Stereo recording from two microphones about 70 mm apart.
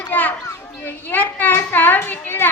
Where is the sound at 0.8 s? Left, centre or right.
Left.